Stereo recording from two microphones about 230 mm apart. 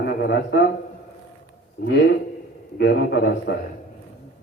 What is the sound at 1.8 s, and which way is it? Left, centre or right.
A man's voice, left.